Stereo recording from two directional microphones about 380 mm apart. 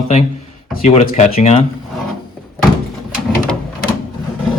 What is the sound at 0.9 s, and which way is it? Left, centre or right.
Speech, centre.